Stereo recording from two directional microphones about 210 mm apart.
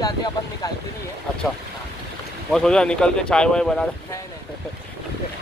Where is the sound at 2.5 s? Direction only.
5° left (ahead or behind).